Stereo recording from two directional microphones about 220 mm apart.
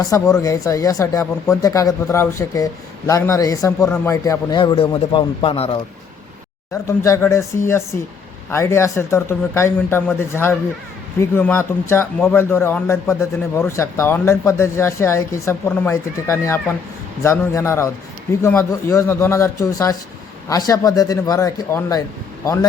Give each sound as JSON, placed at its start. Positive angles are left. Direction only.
{"t": 0.0, "sound": "a man's voice", "side_deg": 15}
{"t": 6.8, "sound": "speech", "side_deg": 15}